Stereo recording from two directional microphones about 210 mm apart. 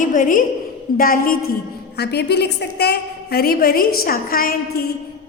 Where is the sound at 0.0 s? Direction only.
40° left (ahead or behind).